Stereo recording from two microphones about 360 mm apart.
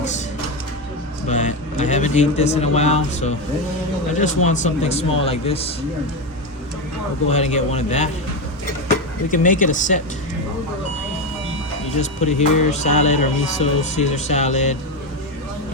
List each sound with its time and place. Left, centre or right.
1.3 s a man's voice: centre
4.4 s speech: centre
7.3 s a man's voice: centre
9.3 s a man's voice: left
11.9 s a man's voice: centre